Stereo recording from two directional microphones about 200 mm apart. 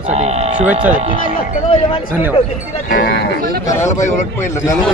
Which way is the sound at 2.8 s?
50° left (ahead or behind).